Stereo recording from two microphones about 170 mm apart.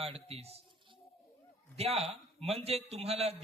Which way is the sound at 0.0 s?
35° right (ahead or behind).